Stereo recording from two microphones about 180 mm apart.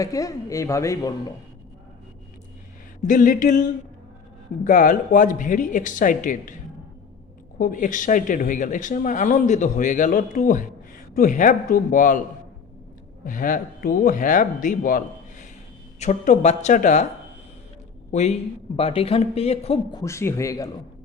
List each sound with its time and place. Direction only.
0.0 s speech: 20° left (ahead or behind)
3.0 s speech: 45° left (ahead or behind)
7.6 s speech: 45° left (ahead or behind)
13.2 s speech: 50° left (ahead or behind)
18.1 s a man's voice: 40° left (ahead or behind)
20.0 s speech: 15° left (ahead or behind)